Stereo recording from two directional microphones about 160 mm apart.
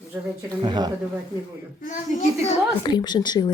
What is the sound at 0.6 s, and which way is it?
Speech, 25° right (ahead or behind).